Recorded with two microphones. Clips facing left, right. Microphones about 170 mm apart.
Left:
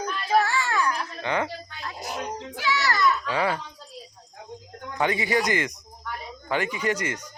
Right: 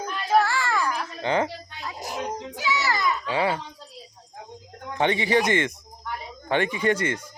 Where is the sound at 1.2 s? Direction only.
30° right (ahead or behind).